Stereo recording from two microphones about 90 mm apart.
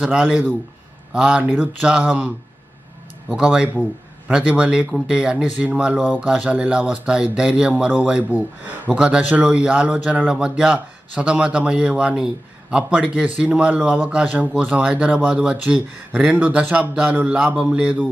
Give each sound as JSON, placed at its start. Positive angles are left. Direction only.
{"t": 0.0, "sound": "a man's voice", "side_deg": -15}
{"t": 3.3, "sound": "a man's voice", "side_deg": -10}